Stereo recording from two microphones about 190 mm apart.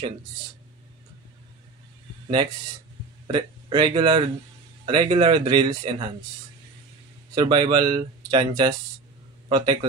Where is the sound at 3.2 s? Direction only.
25° right (ahead or behind).